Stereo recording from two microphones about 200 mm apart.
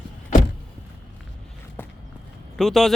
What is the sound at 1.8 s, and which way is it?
Walk, 10° left (ahead or behind).